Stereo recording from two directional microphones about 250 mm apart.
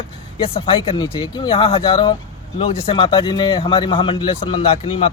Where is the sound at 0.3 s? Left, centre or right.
Left.